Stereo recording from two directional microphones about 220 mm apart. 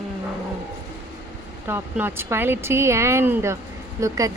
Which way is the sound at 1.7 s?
10° right (ahead or behind).